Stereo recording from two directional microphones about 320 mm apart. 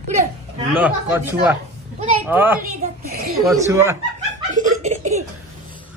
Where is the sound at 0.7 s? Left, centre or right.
Centre.